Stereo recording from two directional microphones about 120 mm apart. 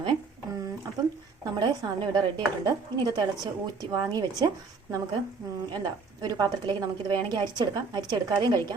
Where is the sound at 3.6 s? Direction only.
35° right (ahead or behind).